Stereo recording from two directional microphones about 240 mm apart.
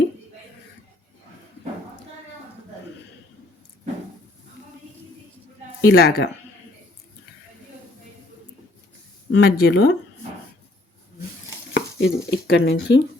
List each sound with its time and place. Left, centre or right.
5.8 s speech: left
9.3 s speech: left
11.7 s speech: left